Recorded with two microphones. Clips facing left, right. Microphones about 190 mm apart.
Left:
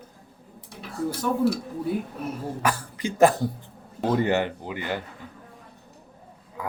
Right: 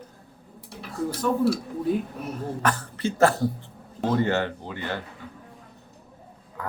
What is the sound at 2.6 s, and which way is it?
Speech, 10° left (ahead or behind).